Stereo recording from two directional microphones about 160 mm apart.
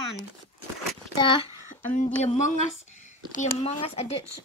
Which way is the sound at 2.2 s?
45° left (ahead or behind).